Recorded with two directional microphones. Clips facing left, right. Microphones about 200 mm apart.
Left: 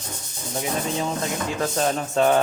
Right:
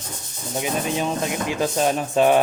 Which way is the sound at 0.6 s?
15° right (ahead or behind).